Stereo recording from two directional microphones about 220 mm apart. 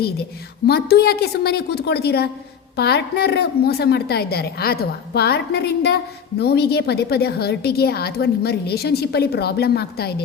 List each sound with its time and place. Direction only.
0.7 s a woman's voice: 45° left (ahead or behind)